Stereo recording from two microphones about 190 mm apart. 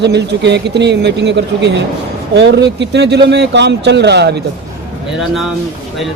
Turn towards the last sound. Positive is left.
turn(degrees=-60)  # may be behind; listen again after turning